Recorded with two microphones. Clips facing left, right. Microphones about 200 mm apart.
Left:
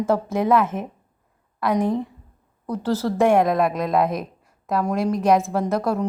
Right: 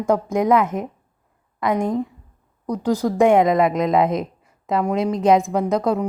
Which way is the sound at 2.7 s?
15° right (ahead or behind).